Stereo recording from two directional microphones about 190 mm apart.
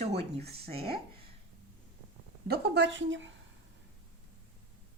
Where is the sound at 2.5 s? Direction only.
65° right (ahead or behind).